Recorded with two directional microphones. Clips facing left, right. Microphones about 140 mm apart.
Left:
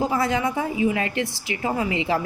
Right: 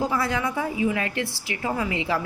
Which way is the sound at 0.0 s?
20° left (ahead or behind).